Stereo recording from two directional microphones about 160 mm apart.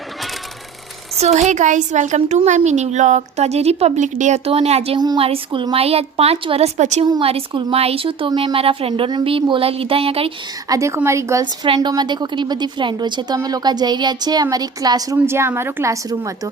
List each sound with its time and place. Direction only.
1.2 s a woman's voice: 45° right (ahead or behind)
4.9 s a woman's voice: 30° right (ahead or behind); by 7.0 s 45° right (ahead or behind)
7.0 s a woman's voice: 30° right (ahead or behind)
10.7 s a woman's voice: 20° right (ahead or behind)
11.6 s a woman's voice: 30° right (ahead or behind)